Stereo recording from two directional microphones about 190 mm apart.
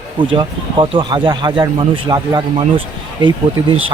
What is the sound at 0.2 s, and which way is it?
Speech, 25° right (ahead or behind).